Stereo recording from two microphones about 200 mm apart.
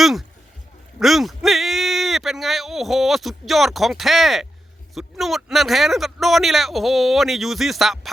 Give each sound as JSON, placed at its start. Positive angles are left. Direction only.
{"t": 0.0, "sound": "speech", "side_deg": 0}